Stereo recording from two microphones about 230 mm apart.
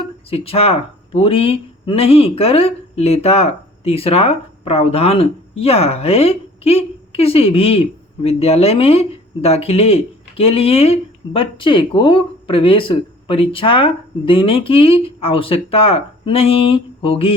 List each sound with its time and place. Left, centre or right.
0.0 s speech: left